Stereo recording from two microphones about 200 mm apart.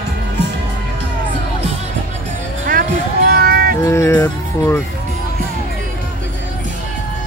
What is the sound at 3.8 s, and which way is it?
Music, 15° left (ahead or behind).